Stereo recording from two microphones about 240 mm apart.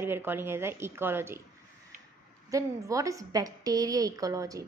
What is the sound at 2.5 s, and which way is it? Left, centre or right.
A woman's voice, centre.